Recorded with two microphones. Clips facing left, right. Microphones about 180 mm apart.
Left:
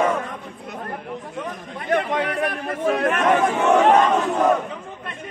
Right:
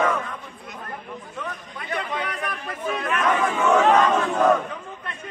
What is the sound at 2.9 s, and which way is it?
Speech, 50° left (ahead or behind).